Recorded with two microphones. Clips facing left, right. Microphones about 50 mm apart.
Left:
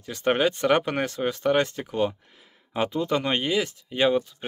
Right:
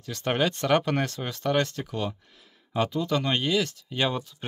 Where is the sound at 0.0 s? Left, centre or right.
Centre.